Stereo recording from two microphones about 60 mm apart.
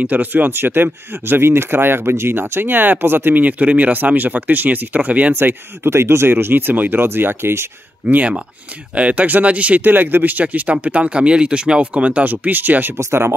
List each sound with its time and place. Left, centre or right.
0.0 s speech: right
5.3 s speech: right
8.1 s speech: right
12.9 s speech: right